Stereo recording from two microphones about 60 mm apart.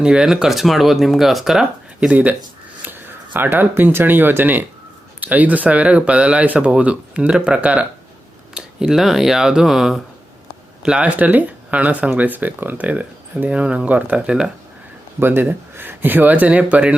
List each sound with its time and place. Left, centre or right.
0.0 s speech: centre
2.0 s speech: right
8.5 s speech: centre
11.2 s speech: right
15.2 s speech: right